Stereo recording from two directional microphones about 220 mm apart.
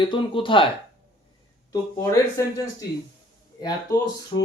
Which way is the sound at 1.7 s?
15° left (ahead or behind).